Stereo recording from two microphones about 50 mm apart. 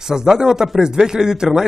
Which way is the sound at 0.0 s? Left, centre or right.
Centre.